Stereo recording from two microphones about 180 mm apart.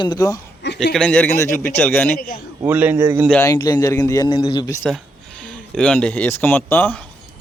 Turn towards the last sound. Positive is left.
turn(degrees=10)  # may be behind; listen again after turning